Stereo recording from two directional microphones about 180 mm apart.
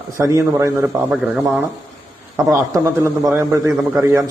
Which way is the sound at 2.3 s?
15° right (ahead or behind).